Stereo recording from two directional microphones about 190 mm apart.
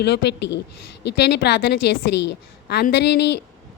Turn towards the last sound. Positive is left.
turn(degrees=60)  # may be behind; listen again after turning